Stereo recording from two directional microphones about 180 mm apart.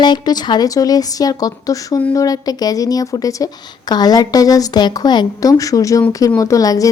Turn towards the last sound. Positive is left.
turn(degrees=20)  # may be behind; listen again after turning